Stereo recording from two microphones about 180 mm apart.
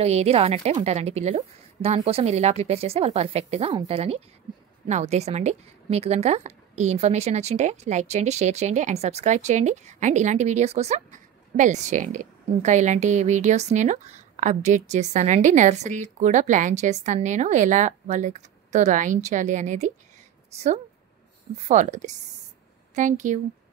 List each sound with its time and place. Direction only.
0.0 s a woman's voice: 35° right (ahead or behind)